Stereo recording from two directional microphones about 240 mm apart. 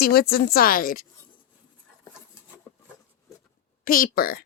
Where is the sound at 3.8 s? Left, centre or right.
Left.